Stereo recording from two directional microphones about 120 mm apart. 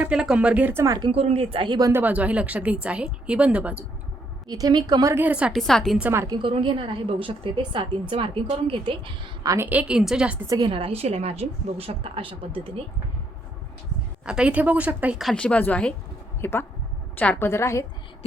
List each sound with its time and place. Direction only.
0.1 s speech: 5° right (ahead or behind)
1.1 s a woman's voice: 55° right (ahead or behind); by 1.9 s 40° right (ahead or behind)
1.9 s speech: 15° right (ahead or behind)
4.4 s a woman's voice: 35° right (ahead or behind)
5.1 s a woman's voice: 10° right (ahead or behind)
6.0 s a woman's voice: 20° right (ahead or behind)
6.2 s a woman's voice: 35° right (ahead or behind)
6.5 s a woman's voice: 45° right (ahead or behind)
9.6 s speech: 10° right (ahead or behind)
10.6 s a woman's voice: 45° right (ahead or behind)
14.3 s speech: 10° right (ahead or behind)
15.2 s a woman's voice: 5° left (ahead or behind); by 17.8 s 25° left (ahead or behind)